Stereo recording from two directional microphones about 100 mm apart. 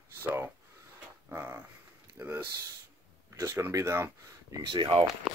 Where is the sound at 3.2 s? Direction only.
30° right (ahead or behind).